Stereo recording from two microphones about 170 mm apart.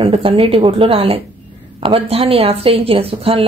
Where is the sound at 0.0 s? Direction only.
30° right (ahead or behind).